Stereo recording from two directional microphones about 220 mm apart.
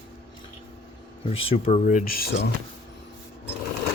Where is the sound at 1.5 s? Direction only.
30° left (ahead or behind).